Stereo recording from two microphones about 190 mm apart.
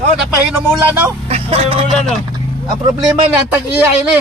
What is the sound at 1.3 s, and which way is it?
Speech, 30° right (ahead or behind).